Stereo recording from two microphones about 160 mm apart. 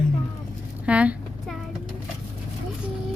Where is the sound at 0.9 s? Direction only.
10° right (ahead or behind).